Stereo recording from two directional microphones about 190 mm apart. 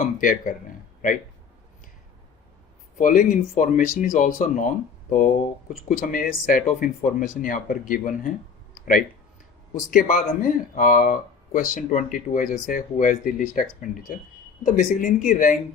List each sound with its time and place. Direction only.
0.0 s speech: 45° left (ahead or behind)
3.0 s speech: 45° left (ahead or behind)
5.9 s speech: 45° left (ahead or behind)
8.7 s a sound: 45° left (ahead or behind)
9.7 s speech: 45° left (ahead or behind)